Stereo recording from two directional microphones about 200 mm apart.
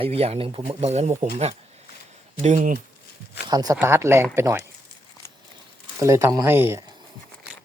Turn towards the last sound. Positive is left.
turn(degrees=-10)  # may be behind; listen again after turning